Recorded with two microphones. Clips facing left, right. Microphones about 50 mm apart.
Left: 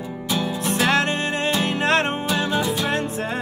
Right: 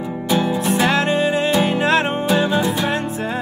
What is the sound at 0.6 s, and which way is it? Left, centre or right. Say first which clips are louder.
Music: right 3 dB; centre.